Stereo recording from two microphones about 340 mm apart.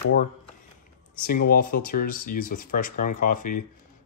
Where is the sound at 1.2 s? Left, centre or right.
Left.